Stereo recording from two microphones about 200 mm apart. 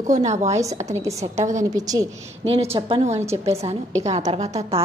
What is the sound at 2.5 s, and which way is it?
A woman's voice, 30° right (ahead or behind).